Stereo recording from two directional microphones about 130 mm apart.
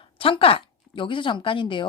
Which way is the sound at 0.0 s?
45° left (ahead or behind).